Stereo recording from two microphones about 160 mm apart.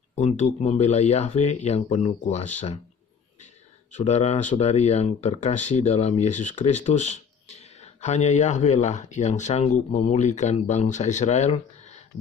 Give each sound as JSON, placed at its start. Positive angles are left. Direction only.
{"t": 0.1, "sound": "speech", "side_deg": 45}
{"t": 3.9, "sound": "speech", "side_deg": 45}